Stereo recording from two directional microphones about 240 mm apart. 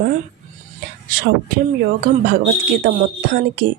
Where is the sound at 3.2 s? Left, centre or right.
Right.